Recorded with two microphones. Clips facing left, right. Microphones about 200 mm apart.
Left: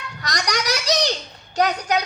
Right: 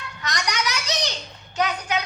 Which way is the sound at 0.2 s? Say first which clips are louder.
Left 2 dB; 35° left (ahead or behind).